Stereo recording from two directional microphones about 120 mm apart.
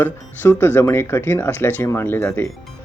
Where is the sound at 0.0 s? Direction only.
15° left (ahead or behind).